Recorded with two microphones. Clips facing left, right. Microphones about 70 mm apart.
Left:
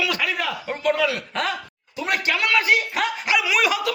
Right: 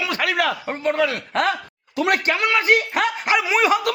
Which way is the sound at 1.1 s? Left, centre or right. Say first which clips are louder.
Right 4 dB; right.